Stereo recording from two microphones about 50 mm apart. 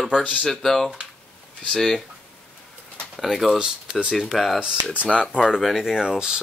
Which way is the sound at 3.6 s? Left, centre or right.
Centre.